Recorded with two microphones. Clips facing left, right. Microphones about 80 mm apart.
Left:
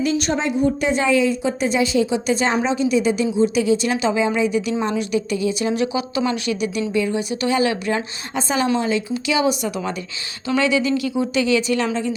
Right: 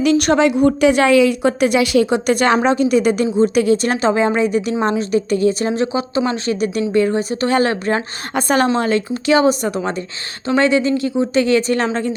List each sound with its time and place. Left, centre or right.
0.0 s a woman's voice: right
2.7 s a woman's voice: right
5.7 s a woman's voice: right
8.4 s a woman's voice: right